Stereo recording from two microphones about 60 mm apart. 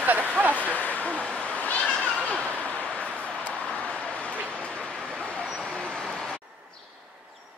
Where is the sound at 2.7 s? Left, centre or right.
Left.